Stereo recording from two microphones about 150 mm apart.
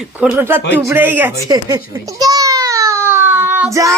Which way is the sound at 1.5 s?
25° right (ahead or behind).